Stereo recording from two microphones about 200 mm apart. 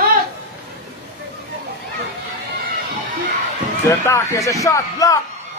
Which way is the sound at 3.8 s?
15° left (ahead or behind).